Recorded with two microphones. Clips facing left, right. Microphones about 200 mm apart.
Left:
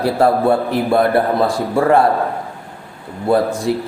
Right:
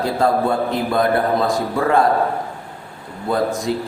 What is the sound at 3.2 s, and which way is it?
Mantra, 30° left (ahead or behind).